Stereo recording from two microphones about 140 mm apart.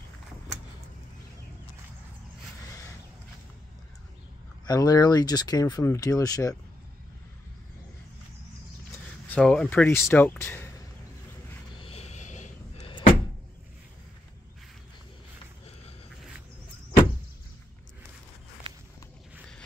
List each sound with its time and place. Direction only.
4.6 s speech: 25° left (ahead or behind)
9.3 s speech: 10° left (ahead or behind)
11.7 s a sound: 40° left (ahead or behind); by 12.8 s 60° left (ahead or behind)
12.8 s door: 40° left (ahead or behind)